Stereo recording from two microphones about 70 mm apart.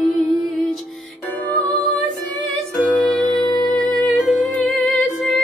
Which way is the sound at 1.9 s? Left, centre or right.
Centre.